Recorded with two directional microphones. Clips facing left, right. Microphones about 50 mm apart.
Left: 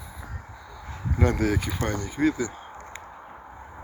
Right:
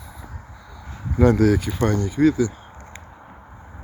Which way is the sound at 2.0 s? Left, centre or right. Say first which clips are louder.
Right 6 dB; left.